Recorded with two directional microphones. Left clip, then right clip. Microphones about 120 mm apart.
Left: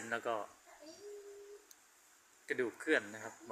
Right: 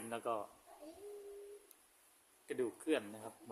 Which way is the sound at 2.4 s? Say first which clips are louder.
Left 3 dB; 25° right (ahead or behind).